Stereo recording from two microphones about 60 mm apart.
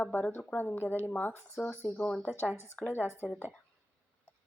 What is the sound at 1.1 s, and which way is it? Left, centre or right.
Speech, left.